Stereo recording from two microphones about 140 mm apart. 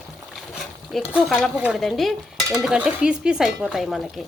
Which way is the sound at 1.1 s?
5° right (ahead or behind).